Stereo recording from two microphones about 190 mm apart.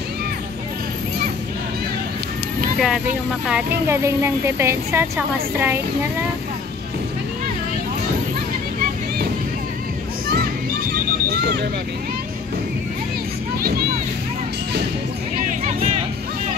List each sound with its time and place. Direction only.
2.8 s speech: 5° right (ahead or behind)
11.2 s vehicle: 60° right (ahead or behind)
13.6 s a sound: 50° right (ahead or behind)